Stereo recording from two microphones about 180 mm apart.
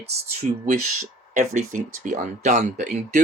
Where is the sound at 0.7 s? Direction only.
45° right (ahead or behind).